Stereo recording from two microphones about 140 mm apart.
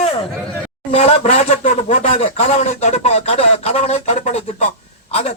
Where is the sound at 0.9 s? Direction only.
50° left (ahead or behind).